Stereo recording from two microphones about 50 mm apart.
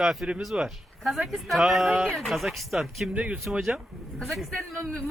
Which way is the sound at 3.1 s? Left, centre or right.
Right.